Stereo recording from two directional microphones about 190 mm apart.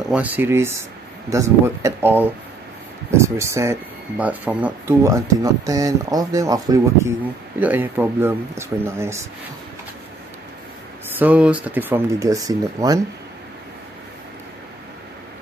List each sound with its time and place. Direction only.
0.1 s speech: 10° right (ahead or behind)
11.1 s speech: 5° right (ahead or behind)